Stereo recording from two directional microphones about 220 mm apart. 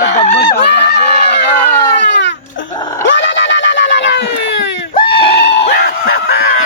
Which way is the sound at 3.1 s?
55° left (ahead or behind).